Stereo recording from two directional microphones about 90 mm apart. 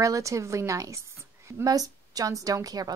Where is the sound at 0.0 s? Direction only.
35° right (ahead or behind).